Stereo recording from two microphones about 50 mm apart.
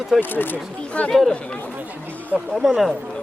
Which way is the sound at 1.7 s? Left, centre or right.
Right.